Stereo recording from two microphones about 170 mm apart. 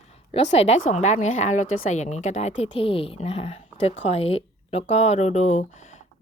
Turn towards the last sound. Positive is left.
turn(degrees=45)  # may be behind; listen again after turning